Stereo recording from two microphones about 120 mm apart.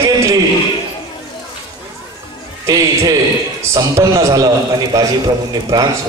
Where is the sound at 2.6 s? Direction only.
30° right (ahead or behind).